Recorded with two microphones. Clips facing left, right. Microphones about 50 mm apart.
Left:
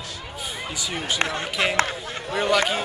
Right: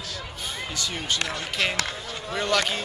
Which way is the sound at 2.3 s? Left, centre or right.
Centre.